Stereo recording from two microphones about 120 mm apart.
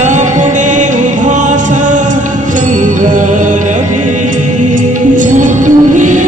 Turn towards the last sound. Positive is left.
turn(degrees=-90)